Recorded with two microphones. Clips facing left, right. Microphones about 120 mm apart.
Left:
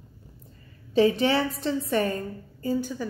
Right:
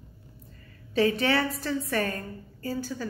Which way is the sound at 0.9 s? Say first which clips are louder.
Left 3 dB; 25° left (ahead or behind).